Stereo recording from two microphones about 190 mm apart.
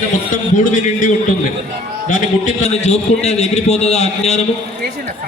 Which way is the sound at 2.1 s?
40° left (ahead or behind).